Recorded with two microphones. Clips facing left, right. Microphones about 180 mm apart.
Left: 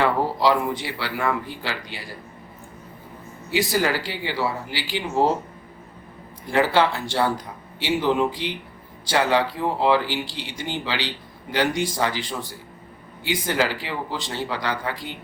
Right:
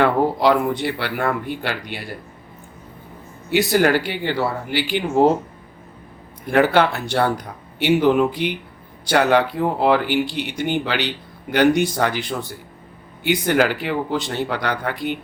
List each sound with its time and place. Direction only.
0.0 s speech: 60° right (ahead or behind)
3.5 s speech: 65° right (ahead or behind)
6.4 s speech: 60° right (ahead or behind)